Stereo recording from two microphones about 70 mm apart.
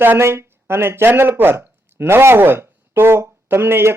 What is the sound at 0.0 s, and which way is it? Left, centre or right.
Speech, right.